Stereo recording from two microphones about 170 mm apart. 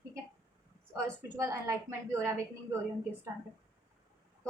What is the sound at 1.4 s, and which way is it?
A woman's voice, 20° right (ahead or behind).